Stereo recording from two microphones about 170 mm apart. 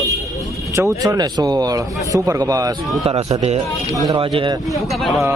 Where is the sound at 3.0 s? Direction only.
35° right (ahead or behind).